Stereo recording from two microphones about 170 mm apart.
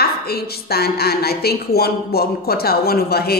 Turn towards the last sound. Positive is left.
turn(degrees=65)  # may be behind; listen again after turning